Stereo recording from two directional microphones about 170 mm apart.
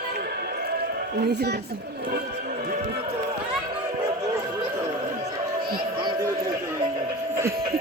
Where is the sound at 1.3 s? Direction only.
75° right (ahead or behind).